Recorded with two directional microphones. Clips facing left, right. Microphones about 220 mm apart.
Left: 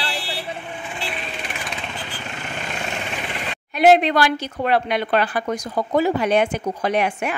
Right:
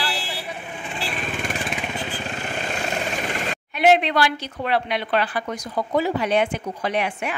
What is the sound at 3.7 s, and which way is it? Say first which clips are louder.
Speech: left 3 dB; 40° left (ahead or behind).